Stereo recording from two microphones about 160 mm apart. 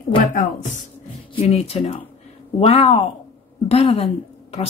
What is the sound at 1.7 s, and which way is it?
A woman's voice, 40° left (ahead or behind).